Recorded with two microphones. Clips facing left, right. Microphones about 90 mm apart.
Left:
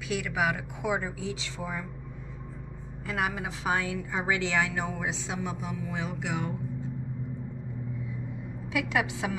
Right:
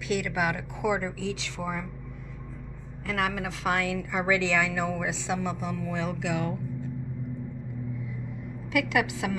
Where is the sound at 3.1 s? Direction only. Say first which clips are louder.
Right 2 dB; 15° left (ahead or behind).